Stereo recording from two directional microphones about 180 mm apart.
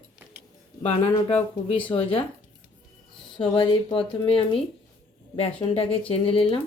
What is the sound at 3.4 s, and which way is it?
Speech, 30° left (ahead or behind).